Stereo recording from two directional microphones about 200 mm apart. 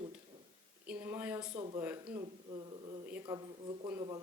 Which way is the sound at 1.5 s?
25° right (ahead or behind).